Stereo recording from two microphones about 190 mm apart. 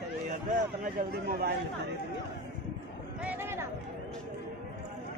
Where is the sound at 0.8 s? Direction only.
55° right (ahead or behind).